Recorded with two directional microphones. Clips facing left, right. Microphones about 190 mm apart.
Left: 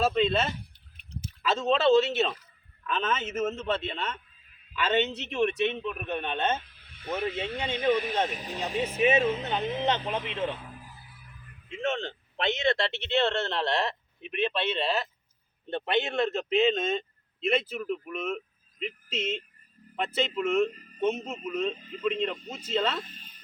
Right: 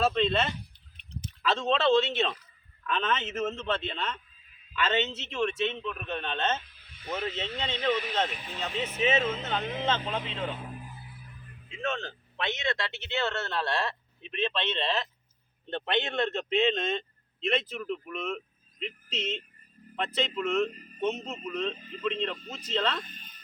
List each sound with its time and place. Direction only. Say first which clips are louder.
0.0 s a man's voice: left 1 dB; 5° left (ahead or behind)
6.6 s a sound: left 2 dB; 55° left (ahead or behind)
7.1 s a man's voice: left 3 dB; 10° left (ahead or behind)
8.3 s speech: left 4 dB; 40° left (ahead or behind)
8.5 s a man's voice: left 4 dB; 15° left (ahead or behind)
11.8 s a man's voice: left 3 dB; 25° left (ahead or behind); by 23.0 s 5° left (ahead or behind)
23.0 s a sound: even; 30° left (ahead or behind)